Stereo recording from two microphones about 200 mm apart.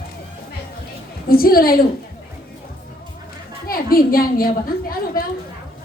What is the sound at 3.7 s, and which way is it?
Speech, 45° left (ahead or behind).